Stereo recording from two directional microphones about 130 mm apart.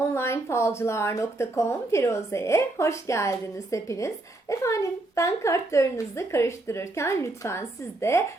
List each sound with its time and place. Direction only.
0.1 s speech: 20° left (ahead or behind)